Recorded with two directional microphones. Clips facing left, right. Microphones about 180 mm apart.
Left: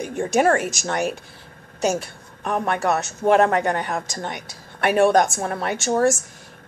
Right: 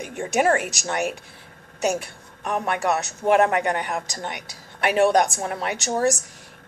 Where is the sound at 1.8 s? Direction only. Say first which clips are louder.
Left 2 dB; 15° right (ahead or behind).